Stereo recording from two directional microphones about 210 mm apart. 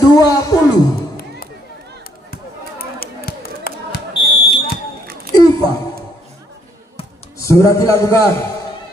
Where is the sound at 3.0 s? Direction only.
45° left (ahead or behind).